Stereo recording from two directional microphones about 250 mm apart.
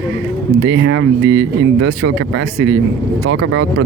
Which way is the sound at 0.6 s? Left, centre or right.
Right.